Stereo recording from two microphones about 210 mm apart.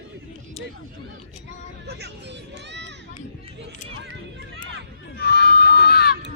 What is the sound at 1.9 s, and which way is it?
Speech, 50° right (ahead or behind).